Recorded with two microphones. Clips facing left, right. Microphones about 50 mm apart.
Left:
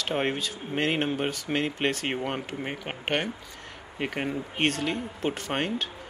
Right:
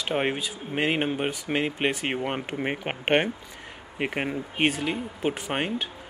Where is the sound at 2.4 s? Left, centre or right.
Right.